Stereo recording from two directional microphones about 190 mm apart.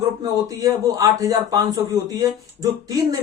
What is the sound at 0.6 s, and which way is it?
A man's voice, 20° right (ahead or behind).